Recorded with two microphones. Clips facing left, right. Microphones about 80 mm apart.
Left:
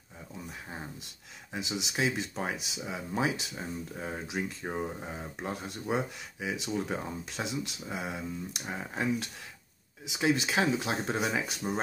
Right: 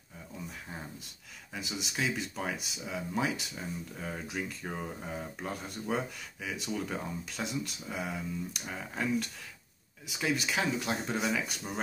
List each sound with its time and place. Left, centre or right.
1.7 s speech: left
10.1 s speech: left